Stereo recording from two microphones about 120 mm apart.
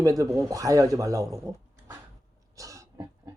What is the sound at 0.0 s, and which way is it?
Speech, 30° right (ahead or behind).